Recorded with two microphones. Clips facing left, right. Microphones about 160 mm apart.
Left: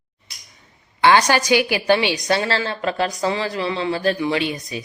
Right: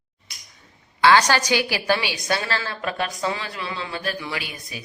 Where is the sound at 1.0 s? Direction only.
15° left (ahead or behind).